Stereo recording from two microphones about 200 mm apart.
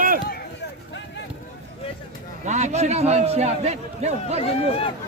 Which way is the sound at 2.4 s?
35° right (ahead or behind).